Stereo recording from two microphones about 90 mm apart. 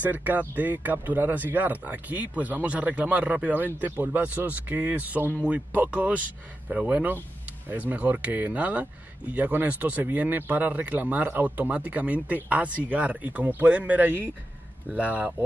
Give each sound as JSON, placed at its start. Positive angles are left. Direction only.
{"t": 0.0, "sound": "speech", "side_deg": -20}